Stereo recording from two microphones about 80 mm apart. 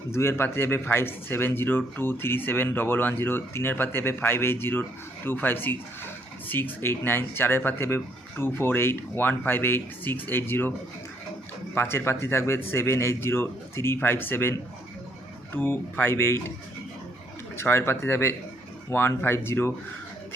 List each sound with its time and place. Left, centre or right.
0.1 s speech: left
11.7 s a man's voice: left
15.5 s speech: left
17.6 s a man's voice: left